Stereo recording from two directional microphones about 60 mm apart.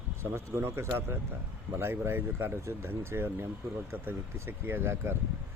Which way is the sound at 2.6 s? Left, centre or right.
Right.